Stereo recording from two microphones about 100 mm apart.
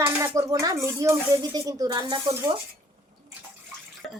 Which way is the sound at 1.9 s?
50° right (ahead or behind).